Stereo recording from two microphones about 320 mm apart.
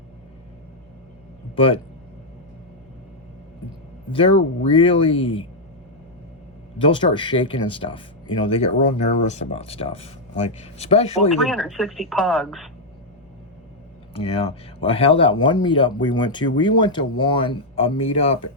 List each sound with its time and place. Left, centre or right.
1.5 s speech: centre
4.7 s speech: centre
6.7 s speech: centre
11.3 s speech: centre
14.1 s speech: centre
18.4 s speech: left